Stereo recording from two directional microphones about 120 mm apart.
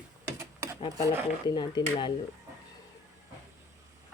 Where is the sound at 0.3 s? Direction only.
20° right (ahead or behind).